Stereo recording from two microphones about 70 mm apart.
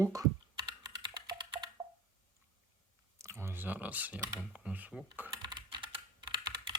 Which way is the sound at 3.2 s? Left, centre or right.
Right.